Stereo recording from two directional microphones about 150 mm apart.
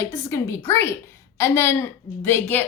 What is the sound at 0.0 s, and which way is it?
A woman's voice, 20° left (ahead or behind).